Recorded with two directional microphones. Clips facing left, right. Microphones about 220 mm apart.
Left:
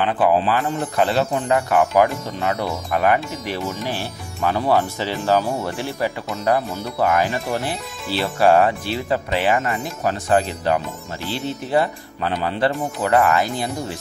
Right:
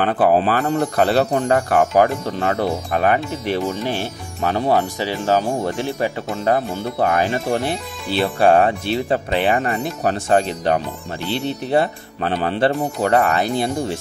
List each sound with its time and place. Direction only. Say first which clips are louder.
0.0 s speech: right 2 dB; 45° right (ahead or behind)
2.7 s speech: right 1 dB; 30° right (ahead or behind)
7.7 s speech: right 3 dB; centre (ahead or behind)
8.4 s speech: even; 30° right (ahead or behind)
11.2 s speech: right 3 dB; 65° right (ahead or behind)
11.7 s speech: right 1 dB; 25° right (ahead or behind)